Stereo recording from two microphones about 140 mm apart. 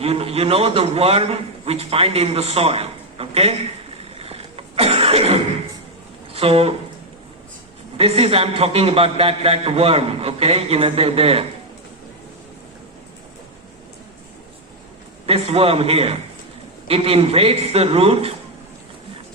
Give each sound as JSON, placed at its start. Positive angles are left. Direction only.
{"t": 0.0, "sound": "a man's voice", "side_deg": -45}
{"t": 4.2, "sound": "cough", "side_deg": -45}
{"t": 6.3, "sound": "speech", "side_deg": -45}
{"t": 7.9, "sound": "a man's voice", "side_deg": -45}
{"t": 15.3, "sound": "a man's voice", "side_deg": -45}